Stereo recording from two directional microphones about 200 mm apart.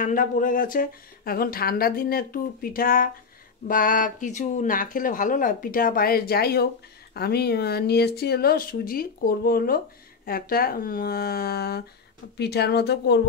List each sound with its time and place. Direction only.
0.0 s speech: 40° left (ahead or behind)